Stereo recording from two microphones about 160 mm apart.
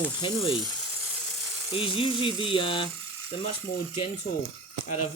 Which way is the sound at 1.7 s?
35° left (ahead or behind).